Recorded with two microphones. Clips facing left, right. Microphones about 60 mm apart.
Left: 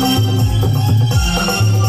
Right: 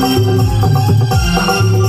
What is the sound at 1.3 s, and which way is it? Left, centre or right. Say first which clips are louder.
Music: right 5 dB; right.